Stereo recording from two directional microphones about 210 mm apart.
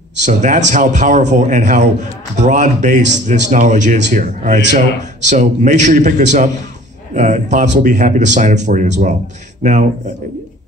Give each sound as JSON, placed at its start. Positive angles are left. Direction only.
{"t": 0.2, "sound": "a man's voice", "side_deg": -35}